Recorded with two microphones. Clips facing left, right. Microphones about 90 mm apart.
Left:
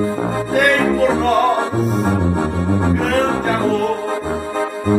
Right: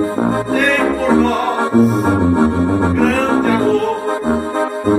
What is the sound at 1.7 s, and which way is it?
Music, 45° right (ahead or behind).